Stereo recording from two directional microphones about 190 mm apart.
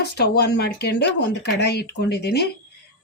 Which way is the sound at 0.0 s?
60° left (ahead or behind).